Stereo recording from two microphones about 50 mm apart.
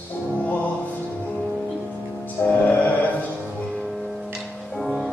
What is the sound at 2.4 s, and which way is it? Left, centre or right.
Music, left.